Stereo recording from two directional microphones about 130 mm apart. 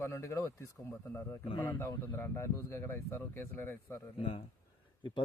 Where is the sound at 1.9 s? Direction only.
20° left (ahead or behind).